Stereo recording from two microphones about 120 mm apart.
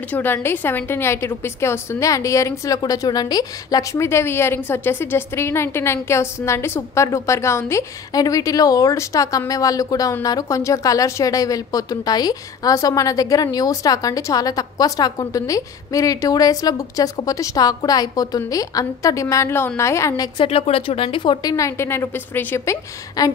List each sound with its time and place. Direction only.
0.1 s speech: 20° left (ahead or behind)
20.3 s a woman's voice: 55° left (ahead or behind); by 22.8 s 15° left (ahead or behind)
23.2 s a woman's voice: 30° left (ahead or behind)